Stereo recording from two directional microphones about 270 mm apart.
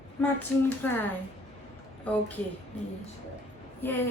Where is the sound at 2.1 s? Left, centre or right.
Centre.